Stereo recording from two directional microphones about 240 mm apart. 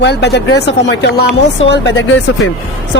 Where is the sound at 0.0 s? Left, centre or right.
Left.